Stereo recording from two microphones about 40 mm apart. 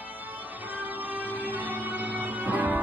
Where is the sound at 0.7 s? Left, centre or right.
Right.